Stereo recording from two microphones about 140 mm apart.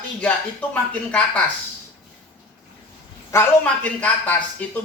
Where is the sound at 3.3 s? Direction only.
15° left (ahead or behind).